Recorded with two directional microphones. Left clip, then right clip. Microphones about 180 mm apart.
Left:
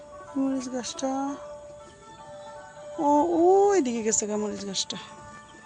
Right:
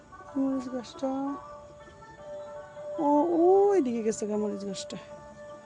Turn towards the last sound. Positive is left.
turn(degrees=-10)  # may be behind; listen again after turning